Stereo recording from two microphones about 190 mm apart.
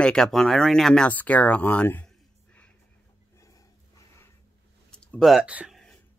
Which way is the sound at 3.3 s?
15° left (ahead or behind).